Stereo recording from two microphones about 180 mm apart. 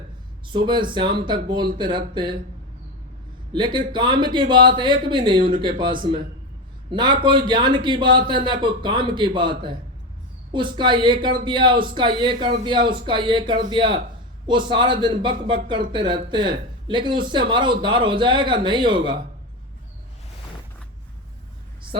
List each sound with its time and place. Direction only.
0.5 s speech: 25° right (ahead or behind)
3.5 s speech: 25° right (ahead or behind)